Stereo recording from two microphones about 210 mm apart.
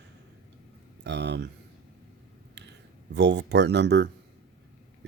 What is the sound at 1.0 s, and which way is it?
Speech, 55° right (ahead or behind).